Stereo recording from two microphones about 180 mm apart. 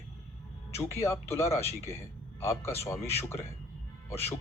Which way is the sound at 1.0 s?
15° left (ahead or behind).